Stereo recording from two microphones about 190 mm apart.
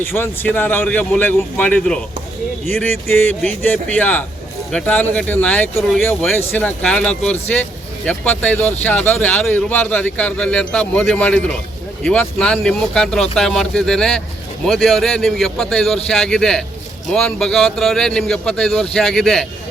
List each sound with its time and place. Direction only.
0.0 s speech: 10° left (ahead or behind)